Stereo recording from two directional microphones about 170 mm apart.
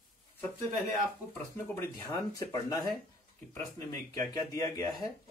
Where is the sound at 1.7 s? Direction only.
15° left (ahead or behind).